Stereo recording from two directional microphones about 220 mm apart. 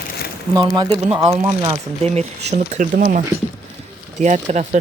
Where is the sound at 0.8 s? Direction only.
25° right (ahead or behind).